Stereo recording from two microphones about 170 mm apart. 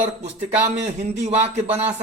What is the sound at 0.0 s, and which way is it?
A man's voice, 40° right (ahead or behind).